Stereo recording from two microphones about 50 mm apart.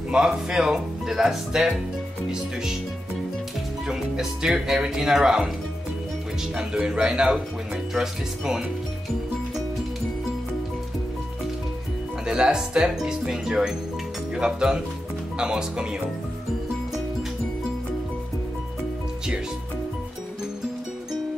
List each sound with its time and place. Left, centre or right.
0.1 s speech: centre
3.8 s speech: centre
6.9 s speech: centre
12.3 s speech: centre